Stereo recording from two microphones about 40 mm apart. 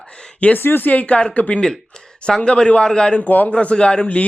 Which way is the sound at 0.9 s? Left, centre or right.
Left.